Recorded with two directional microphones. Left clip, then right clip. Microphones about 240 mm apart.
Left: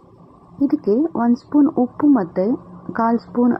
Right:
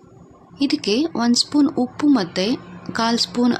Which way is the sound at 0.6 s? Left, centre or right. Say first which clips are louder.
Left 2 dB; centre.